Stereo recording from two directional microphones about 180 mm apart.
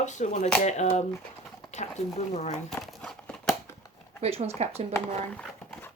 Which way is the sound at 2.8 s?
Centre (ahead or behind).